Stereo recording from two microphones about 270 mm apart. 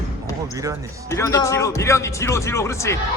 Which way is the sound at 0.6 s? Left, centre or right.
Centre.